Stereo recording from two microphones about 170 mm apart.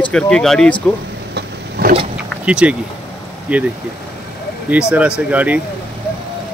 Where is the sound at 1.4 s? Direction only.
65° right (ahead or behind).